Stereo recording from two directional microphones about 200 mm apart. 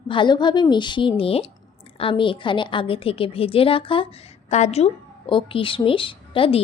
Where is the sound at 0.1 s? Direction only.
25° left (ahead or behind).